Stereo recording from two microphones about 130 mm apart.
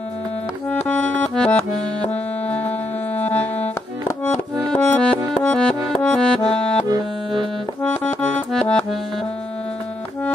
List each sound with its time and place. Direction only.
0.7 s accordion: 10° left (ahead or behind)
3.2 s music: 10° left (ahead or behind)
4.7 s music: 10° left (ahead or behind)
7.8 s music: 10° left (ahead or behind)